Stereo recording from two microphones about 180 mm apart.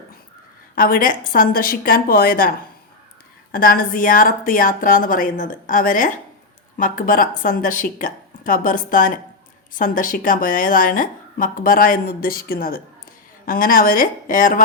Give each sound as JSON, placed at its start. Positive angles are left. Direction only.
{"t": 0.8, "sound": "a woman's voice", "side_deg": 50}
{"t": 3.5, "sound": "a woman's voice", "side_deg": 50}